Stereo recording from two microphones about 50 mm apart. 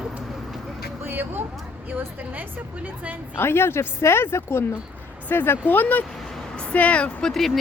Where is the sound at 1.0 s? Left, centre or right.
Right.